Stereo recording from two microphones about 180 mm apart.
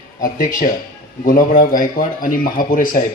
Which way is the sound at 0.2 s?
50° left (ahead or behind).